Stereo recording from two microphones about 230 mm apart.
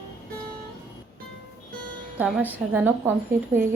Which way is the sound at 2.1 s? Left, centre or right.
Centre.